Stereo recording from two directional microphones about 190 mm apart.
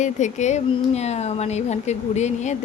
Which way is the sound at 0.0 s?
40° left (ahead or behind).